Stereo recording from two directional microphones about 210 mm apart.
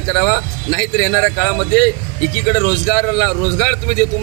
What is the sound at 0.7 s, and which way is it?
Speech, 15° left (ahead or behind).